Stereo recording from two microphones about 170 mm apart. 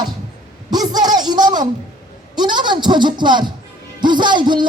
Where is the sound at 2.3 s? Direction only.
25° right (ahead or behind).